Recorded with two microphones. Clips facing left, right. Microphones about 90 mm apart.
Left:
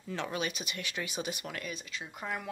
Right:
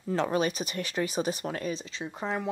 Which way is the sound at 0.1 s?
40° right (ahead or behind).